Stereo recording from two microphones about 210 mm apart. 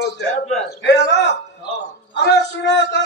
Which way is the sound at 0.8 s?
55° left (ahead or behind).